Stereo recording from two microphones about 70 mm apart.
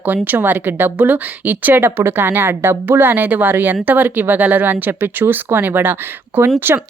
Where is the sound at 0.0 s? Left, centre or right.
Right.